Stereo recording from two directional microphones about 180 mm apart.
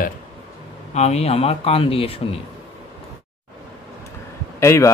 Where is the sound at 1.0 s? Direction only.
35° left (ahead or behind).